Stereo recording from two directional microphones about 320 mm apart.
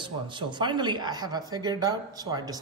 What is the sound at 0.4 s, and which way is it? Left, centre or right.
A woman's voice, centre.